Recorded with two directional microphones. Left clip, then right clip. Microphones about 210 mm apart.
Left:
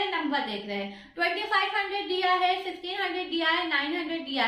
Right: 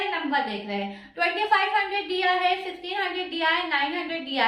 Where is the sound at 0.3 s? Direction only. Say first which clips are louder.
Right 3 dB; 5° right (ahead or behind).